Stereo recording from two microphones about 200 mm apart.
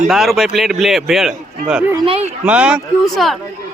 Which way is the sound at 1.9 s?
30° right (ahead or behind).